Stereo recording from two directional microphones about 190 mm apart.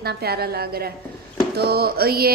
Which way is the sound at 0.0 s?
55° right (ahead or behind).